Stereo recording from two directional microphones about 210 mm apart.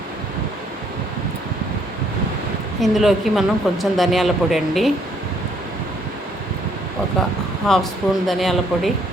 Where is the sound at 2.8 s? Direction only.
Centre (ahead or behind).